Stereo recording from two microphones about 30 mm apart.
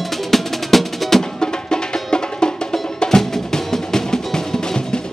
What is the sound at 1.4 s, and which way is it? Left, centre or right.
Music, left.